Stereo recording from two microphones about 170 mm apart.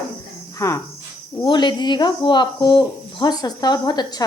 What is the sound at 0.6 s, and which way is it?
Speech, 20° left (ahead or behind).